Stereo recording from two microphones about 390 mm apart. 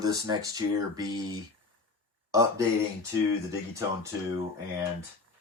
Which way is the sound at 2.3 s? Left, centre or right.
Centre.